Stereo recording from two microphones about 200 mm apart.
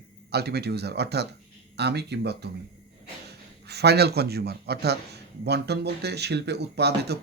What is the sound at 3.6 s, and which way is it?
Speech, 55° right (ahead or behind).